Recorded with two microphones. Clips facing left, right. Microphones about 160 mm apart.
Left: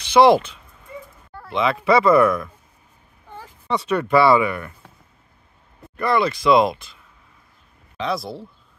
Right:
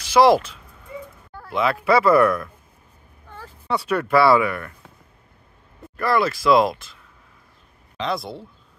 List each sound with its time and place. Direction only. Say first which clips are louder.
0.0 s speech: left 1 dB; centre (ahead or behind)
3.3 s a sound: left 1 dB; 15° left (ahead or behind)
3.6 s speech: left 1 dB; 5° right (ahead or behind)
5.9 s speech: left 1 dB; centre (ahead or behind)
8.0 s speech: left 1 dB; centre (ahead or behind)